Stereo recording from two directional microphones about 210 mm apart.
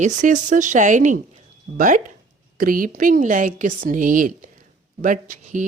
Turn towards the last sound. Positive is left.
turn(degrees=-40)  # may be behind; listen again after turning